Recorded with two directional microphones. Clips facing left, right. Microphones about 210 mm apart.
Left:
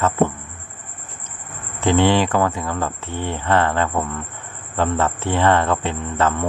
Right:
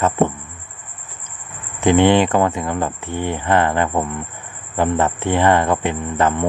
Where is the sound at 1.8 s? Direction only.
15° right (ahead or behind).